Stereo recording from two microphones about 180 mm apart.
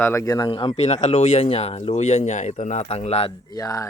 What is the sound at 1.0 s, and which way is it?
Speech, 40° left (ahead or behind).